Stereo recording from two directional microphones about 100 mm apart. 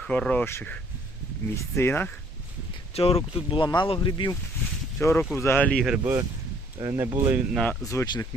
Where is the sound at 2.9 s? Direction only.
75° left (ahead or behind); by 4.3 s 50° left (ahead or behind).